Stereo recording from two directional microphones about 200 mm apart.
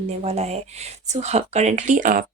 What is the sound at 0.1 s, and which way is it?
Speech, 30° right (ahead or behind).